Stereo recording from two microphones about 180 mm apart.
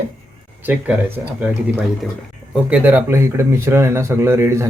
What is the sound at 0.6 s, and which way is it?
Speech, 10° right (ahead or behind).